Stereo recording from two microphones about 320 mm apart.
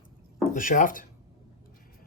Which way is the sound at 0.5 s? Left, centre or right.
Left.